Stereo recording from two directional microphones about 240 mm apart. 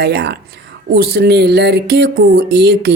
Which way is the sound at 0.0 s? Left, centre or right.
Right.